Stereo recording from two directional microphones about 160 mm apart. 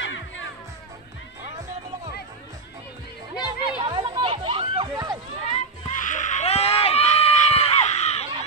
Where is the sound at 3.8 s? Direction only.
30° right (ahead or behind).